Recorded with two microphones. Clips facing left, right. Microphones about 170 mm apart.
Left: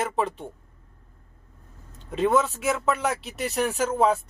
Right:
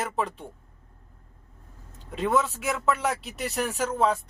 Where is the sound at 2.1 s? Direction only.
Centre (ahead or behind).